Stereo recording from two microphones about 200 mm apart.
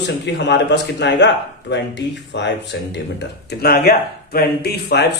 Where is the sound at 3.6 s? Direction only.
50° left (ahead or behind).